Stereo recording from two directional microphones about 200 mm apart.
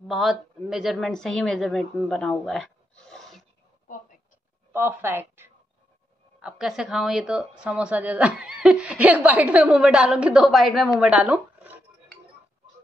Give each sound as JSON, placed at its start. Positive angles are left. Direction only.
{"t": 0.1, "sound": "a woman's voice", "side_deg": 0}
{"t": 4.7, "sound": "a woman's voice", "side_deg": -10}